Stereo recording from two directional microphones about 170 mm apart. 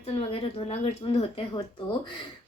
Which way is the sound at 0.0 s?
35° left (ahead or behind).